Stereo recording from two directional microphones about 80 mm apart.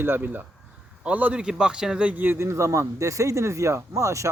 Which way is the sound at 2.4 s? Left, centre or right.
Right.